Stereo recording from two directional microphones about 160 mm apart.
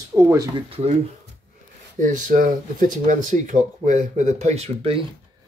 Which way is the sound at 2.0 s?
50° right (ahead or behind).